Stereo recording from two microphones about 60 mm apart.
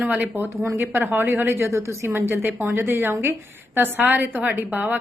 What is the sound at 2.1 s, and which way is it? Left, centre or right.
A woman's voice, right.